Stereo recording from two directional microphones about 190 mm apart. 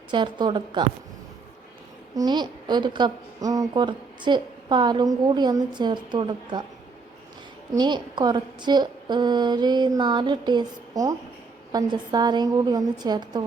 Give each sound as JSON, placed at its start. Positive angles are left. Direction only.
{"t": 0.1, "sound": "speech", "side_deg": -25}
{"t": 2.1, "sound": "speech", "side_deg": -20}
{"t": 7.8, "sound": "speech", "side_deg": -25}